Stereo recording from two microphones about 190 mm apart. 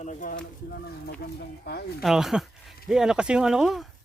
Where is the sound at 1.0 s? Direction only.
55° left (ahead or behind).